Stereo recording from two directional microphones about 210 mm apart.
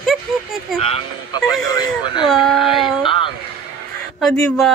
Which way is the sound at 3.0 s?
25° left (ahead or behind).